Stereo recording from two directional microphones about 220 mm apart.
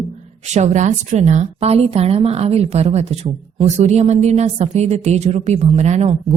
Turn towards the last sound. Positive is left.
turn(degrees=-30)  # may be behind; listen again after turning